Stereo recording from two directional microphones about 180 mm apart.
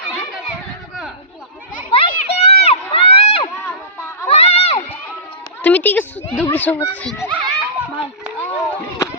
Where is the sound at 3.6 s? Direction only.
15° left (ahead or behind).